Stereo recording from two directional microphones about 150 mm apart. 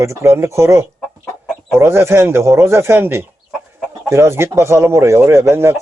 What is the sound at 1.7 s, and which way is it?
Speech, 15° right (ahead or behind).